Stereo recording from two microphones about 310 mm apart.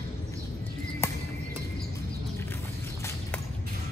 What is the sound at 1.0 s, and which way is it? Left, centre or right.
Music, centre.